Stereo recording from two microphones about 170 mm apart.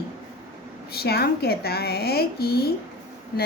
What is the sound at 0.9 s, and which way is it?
A woman's voice, 70° left (ahead or behind).